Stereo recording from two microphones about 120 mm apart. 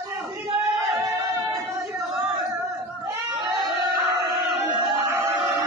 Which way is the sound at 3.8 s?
40° right (ahead or behind).